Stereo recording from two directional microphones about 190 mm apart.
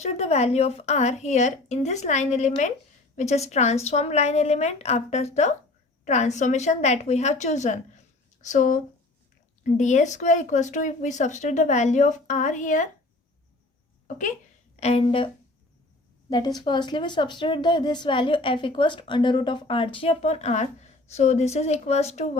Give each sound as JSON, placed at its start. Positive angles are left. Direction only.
{"t": 0.0, "sound": "a woman's voice", "side_deg": 35}
{"t": 14.8, "sound": "speech", "side_deg": 30}
{"t": 16.3, "sound": "a woman's voice", "side_deg": 20}